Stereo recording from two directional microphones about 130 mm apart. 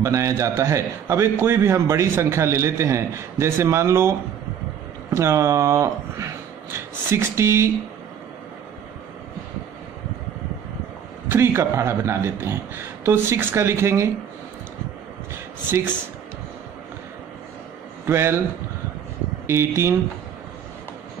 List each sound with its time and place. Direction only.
0.0 s a man's voice: 25° right (ahead or behind)
11.2 s a man's voice: 20° right (ahead or behind)
18.0 s a man's voice: 20° right (ahead or behind)
19.4 s a man's voice: 20° right (ahead or behind)